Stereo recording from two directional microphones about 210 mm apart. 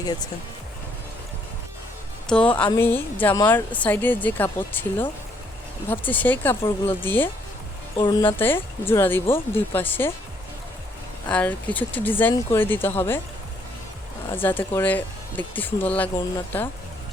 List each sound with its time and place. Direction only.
2.2 s speech: 5° left (ahead or behind)
11.3 s speech: 5° left (ahead or behind)
14.3 s speech: 10° left (ahead or behind)